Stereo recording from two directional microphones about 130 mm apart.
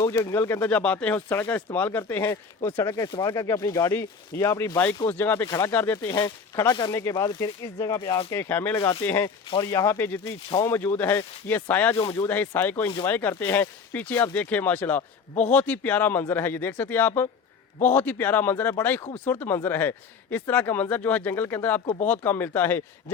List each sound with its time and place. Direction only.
0.0 s speech: 25° left (ahead or behind)
6.1 s speech: 30° left (ahead or behind)
8.4 s speech: 15° left (ahead or behind)
9.5 s speech: 30° left (ahead or behind); by 11.9 s 15° left (ahead or behind)
12.0 s speech: 25° left (ahead or behind)
12.3 s speech: 15° left (ahead or behind)